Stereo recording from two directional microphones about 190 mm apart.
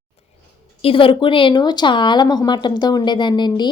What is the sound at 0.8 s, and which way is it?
Speech, 30° left (ahead or behind).